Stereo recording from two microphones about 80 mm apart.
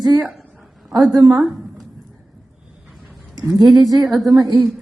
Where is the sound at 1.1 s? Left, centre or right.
Right.